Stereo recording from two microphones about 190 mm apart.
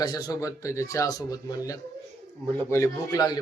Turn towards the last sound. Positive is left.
turn(degrees=20)  # may be behind; listen again after turning